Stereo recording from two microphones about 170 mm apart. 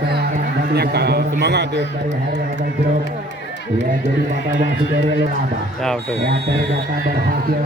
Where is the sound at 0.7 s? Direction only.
70° right (ahead or behind).